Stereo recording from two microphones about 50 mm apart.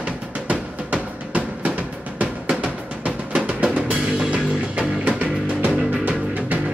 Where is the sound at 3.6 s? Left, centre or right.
Right.